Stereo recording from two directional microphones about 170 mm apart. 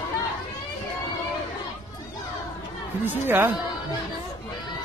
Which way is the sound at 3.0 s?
10° right (ahead or behind).